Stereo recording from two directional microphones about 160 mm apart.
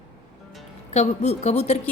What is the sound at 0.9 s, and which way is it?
Speech, 45° left (ahead or behind).